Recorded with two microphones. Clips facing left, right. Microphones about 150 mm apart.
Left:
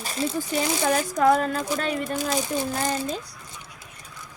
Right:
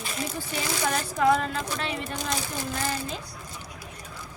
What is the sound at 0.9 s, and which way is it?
A woman's voice, 45° left (ahead or behind).